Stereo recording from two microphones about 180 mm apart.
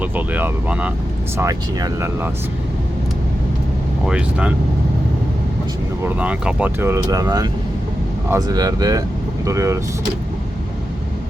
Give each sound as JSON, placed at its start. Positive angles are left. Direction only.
{"t": 0.0, "sound": "speech", "side_deg": -10}
{"t": 4.0, "sound": "speech", "side_deg": -5}
{"t": 6.0, "sound": "speech", "side_deg": -5}